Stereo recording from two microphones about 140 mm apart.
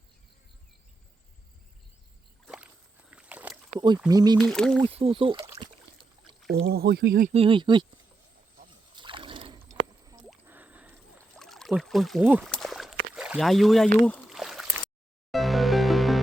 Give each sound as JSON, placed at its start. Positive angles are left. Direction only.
{"t": 2.4, "sound": "rowboat", "side_deg": -5}
{"t": 3.8, "sound": "speech", "side_deg": -30}
{"t": 4.4, "sound": "speech", "side_deg": 5}
{"t": 4.8, "sound": "speech", "side_deg": -45}
{"t": 5.4, "sound": "speech", "side_deg": -25}
{"t": 6.7, "sound": "speech", "side_deg": -85}
{"t": 7.3, "sound": "speech", "side_deg": -40}
{"t": 8.6, "sound": "a sound", "side_deg": -35}
{"t": 9.6, "sound": "a sound", "side_deg": -25}
{"t": 10.4, "sound": "drip", "side_deg": -10}
{"t": 11.3, "sound": "pour", "side_deg": 5}
{"t": 12.2, "sound": "speech", "side_deg": -10}
{"t": 12.5, "sound": "a sound", "side_deg": 0}
{"t": 15.3, "sound": "music", "side_deg": 0}